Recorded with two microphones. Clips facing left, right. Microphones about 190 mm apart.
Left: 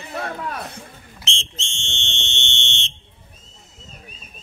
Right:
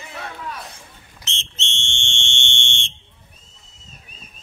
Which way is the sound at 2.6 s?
10° right (ahead or behind).